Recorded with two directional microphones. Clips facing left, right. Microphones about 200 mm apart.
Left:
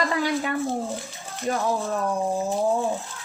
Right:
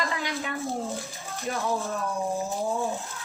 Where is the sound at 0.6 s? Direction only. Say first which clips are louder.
Left 4 dB; 15° left (ahead or behind).